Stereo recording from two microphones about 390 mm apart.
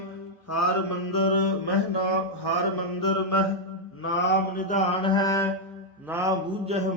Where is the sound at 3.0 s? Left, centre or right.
Left.